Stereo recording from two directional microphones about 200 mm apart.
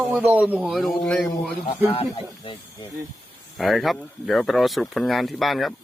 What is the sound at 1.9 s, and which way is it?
Speech, 30° left (ahead or behind).